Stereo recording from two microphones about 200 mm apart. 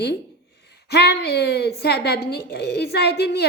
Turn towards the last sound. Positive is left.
turn(degrees=55)  # may be behind; listen again after turning